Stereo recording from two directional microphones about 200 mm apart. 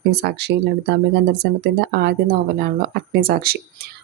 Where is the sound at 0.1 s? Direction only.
55° right (ahead or behind).